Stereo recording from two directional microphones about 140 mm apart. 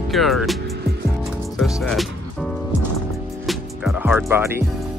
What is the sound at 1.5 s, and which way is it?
Speech, centre (ahead or behind).